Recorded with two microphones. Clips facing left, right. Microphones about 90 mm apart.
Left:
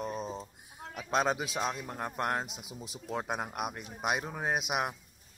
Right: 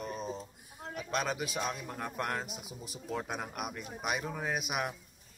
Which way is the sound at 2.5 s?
90° left.